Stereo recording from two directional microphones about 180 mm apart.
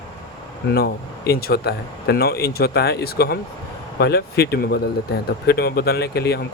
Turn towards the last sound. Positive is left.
turn(degrees=65)  # may be behind; listen again after turning